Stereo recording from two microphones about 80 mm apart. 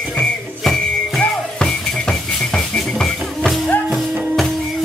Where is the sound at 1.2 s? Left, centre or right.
Centre.